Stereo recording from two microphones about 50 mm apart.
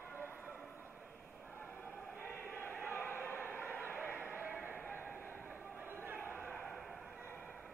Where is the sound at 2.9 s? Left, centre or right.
Left.